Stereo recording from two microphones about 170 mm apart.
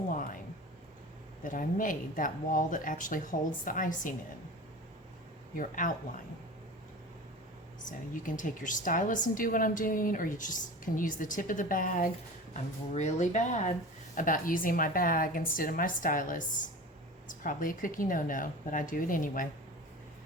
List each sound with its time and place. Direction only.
0.1 s a sound: 55° left (ahead or behind)
1.5 s a woman's voice: 50° left (ahead or behind)
5.5 s a woman's voice: 50° left (ahead or behind)
7.9 s a woman's voice: 50° left (ahead or behind)
12.5 s a woman's voice: 40° left (ahead or behind)